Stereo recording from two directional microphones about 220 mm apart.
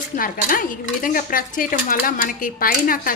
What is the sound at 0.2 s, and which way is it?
Dishes, 40° left (ahead or behind).